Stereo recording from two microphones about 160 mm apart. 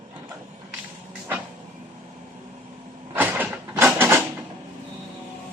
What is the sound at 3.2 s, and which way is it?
Mechanisms, 10° right (ahead or behind).